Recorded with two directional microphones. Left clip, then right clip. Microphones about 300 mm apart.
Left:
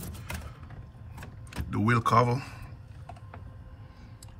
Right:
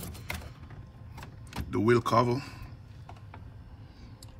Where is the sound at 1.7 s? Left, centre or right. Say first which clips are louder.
Even; centre.